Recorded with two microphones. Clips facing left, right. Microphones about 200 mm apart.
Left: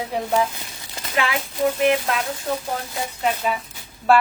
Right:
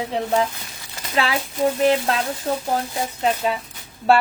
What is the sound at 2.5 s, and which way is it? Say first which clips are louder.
Speech: right 2 dB; 35° right (ahead or behind).